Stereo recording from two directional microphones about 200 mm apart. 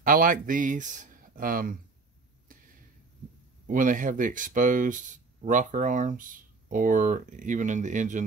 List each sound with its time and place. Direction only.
0.0 s speech: 45° right (ahead or behind)
3.6 s speech: 40° right (ahead or behind)